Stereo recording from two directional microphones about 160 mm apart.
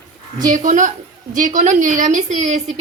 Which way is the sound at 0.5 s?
50° right (ahead or behind).